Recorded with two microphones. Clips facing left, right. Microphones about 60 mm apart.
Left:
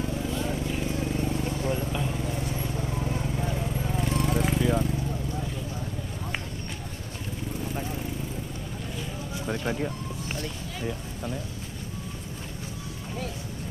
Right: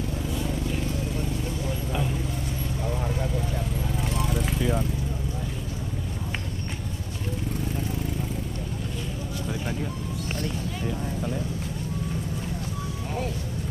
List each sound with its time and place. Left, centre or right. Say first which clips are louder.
4.4 s vehicle: left 2 dB; centre